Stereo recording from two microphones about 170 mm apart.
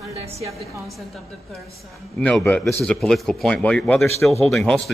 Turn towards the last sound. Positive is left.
turn(degrees=0)  # may be behind; listen again after turning